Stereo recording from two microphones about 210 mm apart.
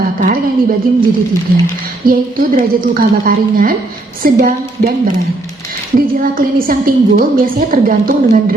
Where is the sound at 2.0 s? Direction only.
45° right (ahead or behind).